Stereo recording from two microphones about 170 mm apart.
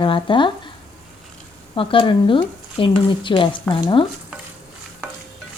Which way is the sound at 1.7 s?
30° left (ahead or behind).